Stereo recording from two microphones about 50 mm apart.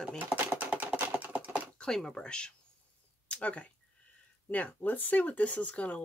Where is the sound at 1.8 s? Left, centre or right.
Centre.